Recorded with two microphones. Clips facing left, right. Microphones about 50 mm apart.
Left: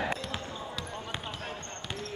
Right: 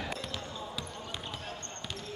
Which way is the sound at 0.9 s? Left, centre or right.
Left.